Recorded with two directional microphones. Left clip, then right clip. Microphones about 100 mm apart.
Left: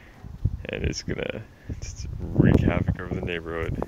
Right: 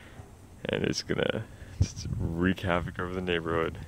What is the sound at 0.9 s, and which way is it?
Speech, 35° right (ahead or behind).